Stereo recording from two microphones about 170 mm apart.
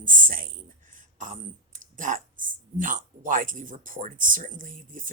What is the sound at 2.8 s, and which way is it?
Speech, 50° right (ahead or behind).